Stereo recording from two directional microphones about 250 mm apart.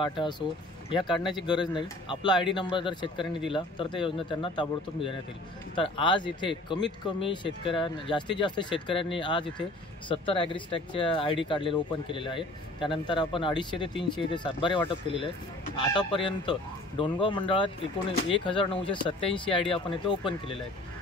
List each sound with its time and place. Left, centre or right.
0.0 s speech: centre